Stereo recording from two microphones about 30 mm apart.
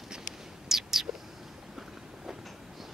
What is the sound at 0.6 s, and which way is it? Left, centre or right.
Whispering, centre.